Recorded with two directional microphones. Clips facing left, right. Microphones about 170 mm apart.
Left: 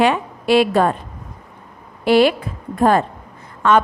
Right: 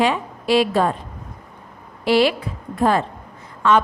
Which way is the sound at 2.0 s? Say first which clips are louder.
Left 3 dB; 50° left (ahead or behind).